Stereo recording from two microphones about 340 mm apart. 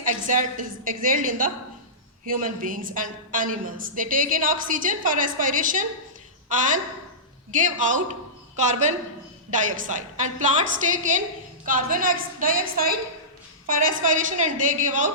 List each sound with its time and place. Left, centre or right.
0.0 s a woman's voice: right